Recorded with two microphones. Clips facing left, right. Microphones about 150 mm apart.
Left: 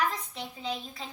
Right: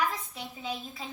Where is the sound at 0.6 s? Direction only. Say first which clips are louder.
Left 1 dB; 10° right (ahead or behind).